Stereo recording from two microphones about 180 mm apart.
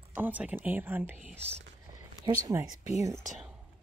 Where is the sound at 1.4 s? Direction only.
5° left (ahead or behind).